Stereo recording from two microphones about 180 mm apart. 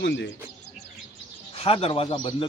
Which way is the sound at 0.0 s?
75° left (ahead or behind).